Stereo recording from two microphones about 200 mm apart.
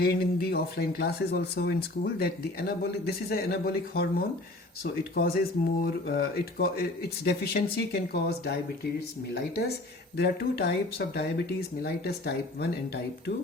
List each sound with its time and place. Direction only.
0.0 s speech: 50° left (ahead or behind)